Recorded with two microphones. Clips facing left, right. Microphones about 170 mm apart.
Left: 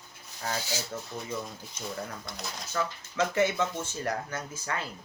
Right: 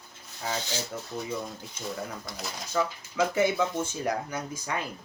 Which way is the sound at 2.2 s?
Centre (ahead or behind).